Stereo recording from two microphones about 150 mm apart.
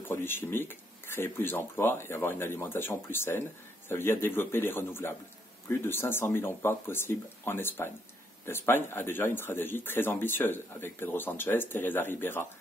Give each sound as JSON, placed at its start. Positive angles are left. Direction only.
{"t": 0.1, "sound": "speech", "side_deg": 15}